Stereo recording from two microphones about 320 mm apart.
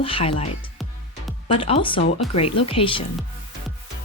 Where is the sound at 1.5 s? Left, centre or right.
Centre.